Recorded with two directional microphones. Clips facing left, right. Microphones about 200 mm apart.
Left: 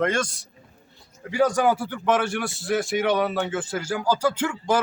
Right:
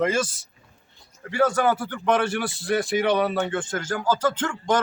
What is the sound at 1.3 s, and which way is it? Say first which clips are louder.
A man's voice: left 1 dB; 15° left (ahead or behind).